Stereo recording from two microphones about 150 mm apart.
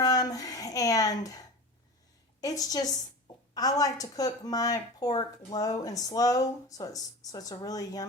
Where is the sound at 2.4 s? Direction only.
25° left (ahead or behind).